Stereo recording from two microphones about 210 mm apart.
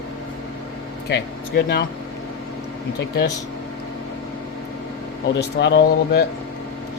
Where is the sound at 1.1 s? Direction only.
50° left (ahead or behind).